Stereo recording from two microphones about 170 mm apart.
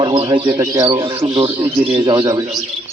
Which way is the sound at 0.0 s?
25° right (ahead or behind).